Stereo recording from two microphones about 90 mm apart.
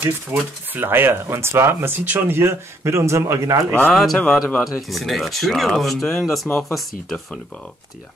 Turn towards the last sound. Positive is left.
turn(degrees=10)  # may be behind; listen again after turning